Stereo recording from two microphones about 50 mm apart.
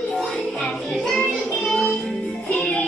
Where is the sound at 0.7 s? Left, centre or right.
Centre.